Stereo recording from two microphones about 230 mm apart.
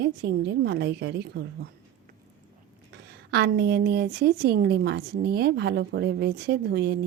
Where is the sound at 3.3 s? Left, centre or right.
Right.